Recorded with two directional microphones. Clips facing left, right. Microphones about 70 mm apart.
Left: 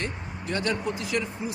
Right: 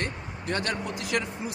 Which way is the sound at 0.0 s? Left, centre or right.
Right.